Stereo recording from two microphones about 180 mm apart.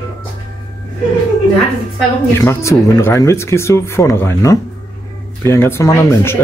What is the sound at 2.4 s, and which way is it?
Speech, 15° left (ahead or behind).